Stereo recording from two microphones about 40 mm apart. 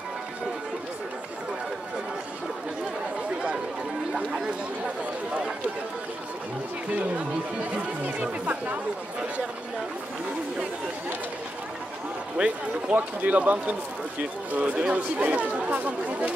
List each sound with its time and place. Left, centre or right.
6.9 s speech: right
12.4 s a man's voice: right
12.9 s speech: right
13.4 s speech: right
14.8 s a man's voice: right